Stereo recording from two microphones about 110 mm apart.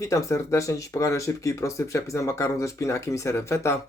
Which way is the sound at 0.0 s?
30° left (ahead or behind).